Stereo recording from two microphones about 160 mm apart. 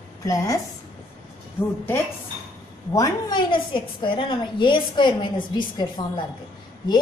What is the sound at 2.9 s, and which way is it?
A woman's voice, 25° left (ahead or behind).